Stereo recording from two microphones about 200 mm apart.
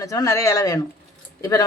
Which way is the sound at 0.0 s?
15° left (ahead or behind).